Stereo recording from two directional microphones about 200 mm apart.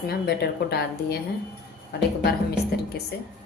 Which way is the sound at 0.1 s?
55° left (ahead or behind).